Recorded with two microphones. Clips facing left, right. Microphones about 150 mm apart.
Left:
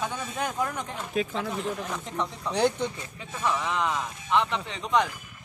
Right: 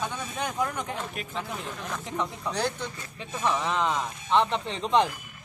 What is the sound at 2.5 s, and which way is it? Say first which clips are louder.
Speech: left 7 dB; 20° left (ahead or behind).